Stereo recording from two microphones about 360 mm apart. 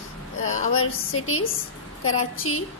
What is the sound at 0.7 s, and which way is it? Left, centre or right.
Speech, left.